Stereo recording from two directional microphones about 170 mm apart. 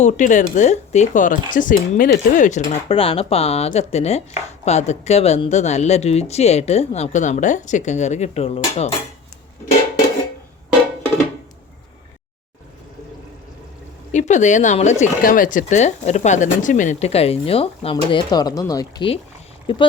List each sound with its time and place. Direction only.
0.0 s speech: 45° left (ahead or behind); by 2.4 s 60° left (ahead or behind)
2.4 s speech: 45° left (ahead or behind)
2.9 s speech: 35° left (ahead or behind)
14.1 s speech: 45° left (ahead or behind)